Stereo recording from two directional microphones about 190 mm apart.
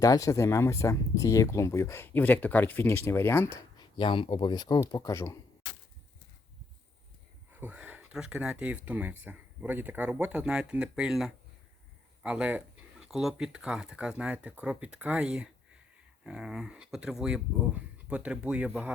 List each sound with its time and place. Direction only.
0.0 s speech: 15° left (ahead or behind)
3.8 s speech: 25° left (ahead or behind)
7.5 s speech: 10° right (ahead or behind)